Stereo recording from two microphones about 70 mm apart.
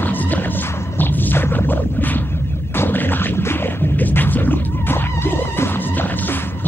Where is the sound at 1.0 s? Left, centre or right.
Left.